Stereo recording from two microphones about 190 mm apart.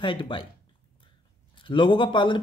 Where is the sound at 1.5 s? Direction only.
25° left (ahead or behind).